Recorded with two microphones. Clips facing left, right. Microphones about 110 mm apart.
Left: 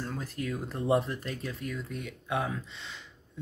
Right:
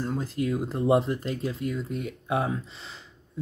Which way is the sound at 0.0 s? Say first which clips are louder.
Right 7 dB; 25° right (ahead or behind).